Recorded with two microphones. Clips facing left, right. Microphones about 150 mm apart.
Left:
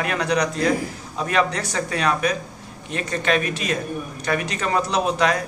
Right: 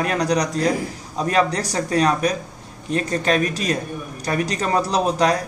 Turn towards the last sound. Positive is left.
turn(degrees=-35)  # may be behind; listen again after turning